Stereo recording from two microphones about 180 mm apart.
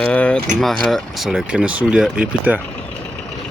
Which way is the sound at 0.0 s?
5° left (ahead or behind).